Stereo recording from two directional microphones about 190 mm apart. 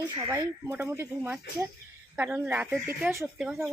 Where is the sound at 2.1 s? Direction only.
10° right (ahead or behind).